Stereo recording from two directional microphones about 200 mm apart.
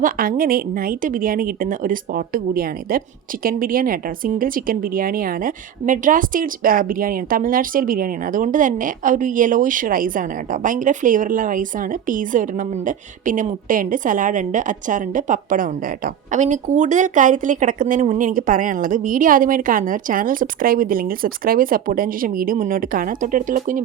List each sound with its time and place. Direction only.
0.0 s a woman's voice: 45° right (ahead or behind)